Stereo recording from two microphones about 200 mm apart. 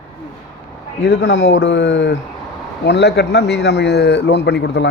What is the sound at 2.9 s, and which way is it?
A man's voice, 60° left (ahead or behind).